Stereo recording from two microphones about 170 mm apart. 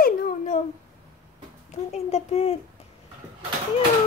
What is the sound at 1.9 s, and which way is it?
Speech, 40° left (ahead or behind).